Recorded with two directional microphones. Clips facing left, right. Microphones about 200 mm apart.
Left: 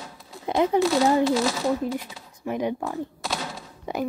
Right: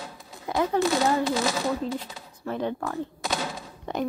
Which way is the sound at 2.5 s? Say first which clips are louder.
Left 2 dB; 15° left (ahead or behind).